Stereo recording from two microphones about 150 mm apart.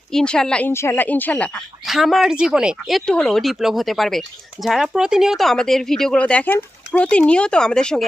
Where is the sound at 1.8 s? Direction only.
Centre (ahead or behind).